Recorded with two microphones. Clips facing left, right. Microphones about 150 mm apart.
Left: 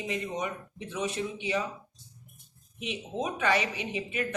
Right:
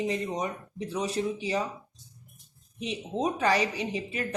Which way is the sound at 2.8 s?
35° right (ahead or behind).